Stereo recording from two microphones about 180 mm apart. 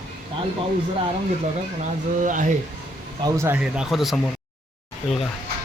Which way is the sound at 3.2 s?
15° right (ahead or behind).